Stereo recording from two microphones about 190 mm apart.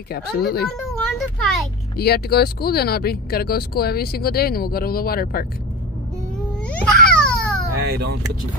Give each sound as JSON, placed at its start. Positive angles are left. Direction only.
{"t": 0.1, "sound": "speech", "side_deg": 55}
{"t": 0.7, "sound": "a child's voice", "side_deg": 0}
{"t": 2.0, "sound": "speech", "side_deg": 55}
{"t": 6.7, "sound": "babbling", "side_deg": 5}
{"t": 7.9, "sound": "speech", "side_deg": -60}